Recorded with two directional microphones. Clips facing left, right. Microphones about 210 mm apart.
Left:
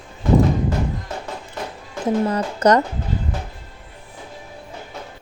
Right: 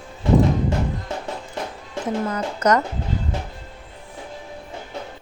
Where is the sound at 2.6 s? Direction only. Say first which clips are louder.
Left 3 dB; 30° left (ahead or behind).